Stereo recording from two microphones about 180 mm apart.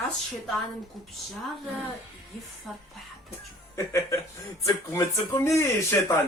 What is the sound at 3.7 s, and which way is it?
Speech, 15° left (ahead or behind).